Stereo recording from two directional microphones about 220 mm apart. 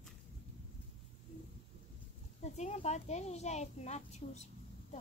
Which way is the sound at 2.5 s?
30° left (ahead or behind).